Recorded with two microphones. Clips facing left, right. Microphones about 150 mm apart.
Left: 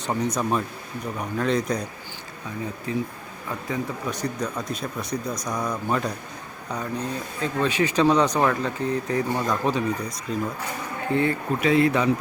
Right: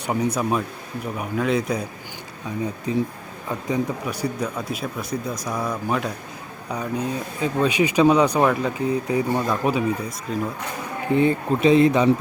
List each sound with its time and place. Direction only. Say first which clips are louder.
0.0 s speech: right 2 dB; 10° right (ahead or behind)
2.9 s speech: right 4 dB; 20° right (ahead or behind)
11.1 s speech: right 4 dB; 20° right (ahead or behind)